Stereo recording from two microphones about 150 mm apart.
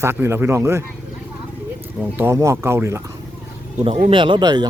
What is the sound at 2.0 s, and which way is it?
A man's voice, 15° right (ahead or behind).